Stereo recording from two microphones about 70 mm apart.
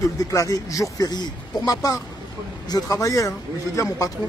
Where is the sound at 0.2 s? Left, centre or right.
Left.